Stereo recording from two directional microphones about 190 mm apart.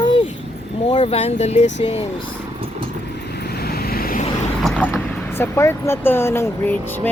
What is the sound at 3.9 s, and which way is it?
Vehicle, 50° left (ahead or behind).